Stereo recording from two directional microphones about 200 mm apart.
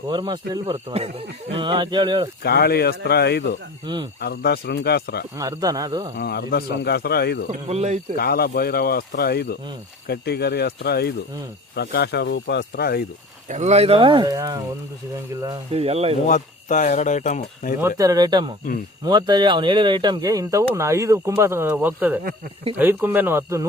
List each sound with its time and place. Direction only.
0.1 s speech: 20° right (ahead or behind)
2.4 s speech: 55° left (ahead or behind)
3.8 s speech: 20° right (ahead or behind)
4.2 s speech: 50° left (ahead or behind)
5.4 s speech: 15° right (ahead or behind)
6.1 s speech: 50° left (ahead or behind)
7.5 s speech: 35° right (ahead or behind)
8.1 s speech: 50° left (ahead or behind)
13.5 s speech: 35° right (ahead or behind); by 14.6 s 15° right (ahead or behind)
15.7 s speech: 30° right (ahead or behind)
16.2 s speech: 40° left (ahead or behind)
17.7 s speech: 15° right (ahead or behind)